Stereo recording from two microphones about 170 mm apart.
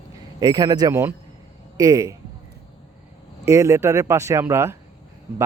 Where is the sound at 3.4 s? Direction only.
15° right (ahead or behind).